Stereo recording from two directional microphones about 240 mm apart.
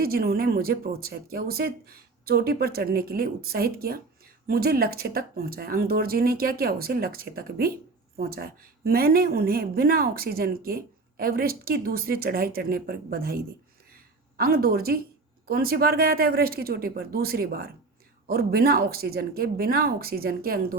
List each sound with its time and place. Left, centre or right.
0.0 s speech: right